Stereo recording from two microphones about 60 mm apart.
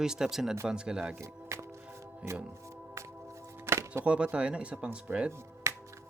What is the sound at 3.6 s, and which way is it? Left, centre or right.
Music, right.